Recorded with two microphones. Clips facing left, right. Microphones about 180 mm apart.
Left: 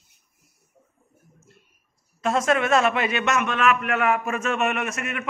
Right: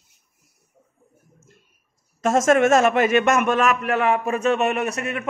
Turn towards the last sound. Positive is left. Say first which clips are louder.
# right 4 dB
turn(degrees=-35)  # may be behind; listen again after turning